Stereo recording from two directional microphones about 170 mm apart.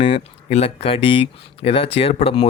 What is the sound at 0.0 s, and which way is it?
Speech, 35° left (ahead or behind).